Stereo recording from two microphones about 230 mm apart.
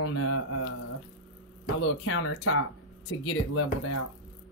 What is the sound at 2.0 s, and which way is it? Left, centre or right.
Speech, left.